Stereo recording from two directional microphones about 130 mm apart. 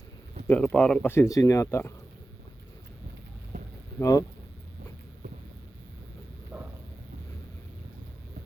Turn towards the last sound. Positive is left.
turn(degrees=-10)  # may be behind; listen again after turning